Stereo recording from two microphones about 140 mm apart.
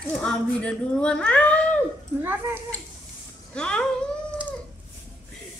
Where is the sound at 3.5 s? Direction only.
5° left (ahead or behind).